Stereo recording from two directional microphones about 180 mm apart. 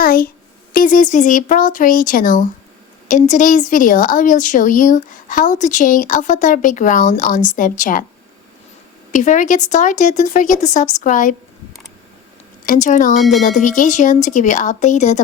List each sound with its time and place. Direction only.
0.0 s a sound: 55° left (ahead or behind)
0.7 s a woman's voice: 50° left (ahead or behind)
9.1 s a woman's voice: 45° left (ahead or behind)
12.6 s a woman's voice: 45° left (ahead or behind)
13.2 s speech: centre (ahead or behind)
13.6 s a woman's voice: 45° left (ahead or behind)